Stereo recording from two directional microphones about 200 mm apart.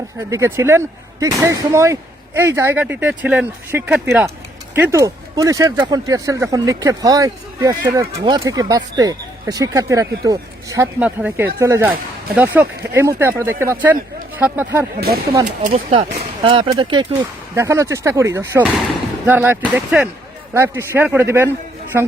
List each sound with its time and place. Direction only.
0.3 s speech: 15° right (ahead or behind)
11.0 s speech: 5° right (ahead or behind)
15.0 s speech: 50° right (ahead or behind)
15.4 s speech: 35° right (ahead or behind)
17.5 s speech: 15° right (ahead or behind)